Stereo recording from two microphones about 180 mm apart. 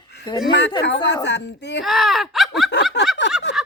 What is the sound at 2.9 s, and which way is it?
Speech, 70° left (ahead or behind).